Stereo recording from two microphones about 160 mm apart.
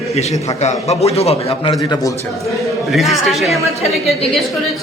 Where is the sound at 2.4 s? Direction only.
Centre (ahead or behind).